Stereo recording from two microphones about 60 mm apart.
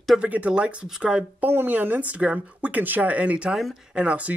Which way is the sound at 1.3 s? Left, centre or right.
Right.